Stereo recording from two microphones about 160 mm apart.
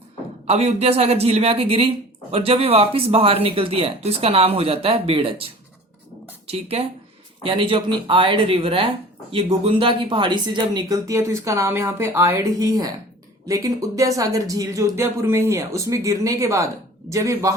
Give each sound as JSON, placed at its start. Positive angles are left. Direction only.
{"t": 0.4, "sound": "speech", "side_deg": -40}
{"t": 6.5, "sound": "speech", "side_deg": -40}